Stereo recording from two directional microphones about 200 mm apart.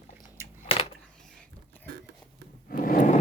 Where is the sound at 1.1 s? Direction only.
5° left (ahead or behind).